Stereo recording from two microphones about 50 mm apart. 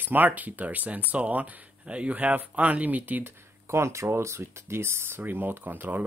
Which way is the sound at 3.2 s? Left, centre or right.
Right.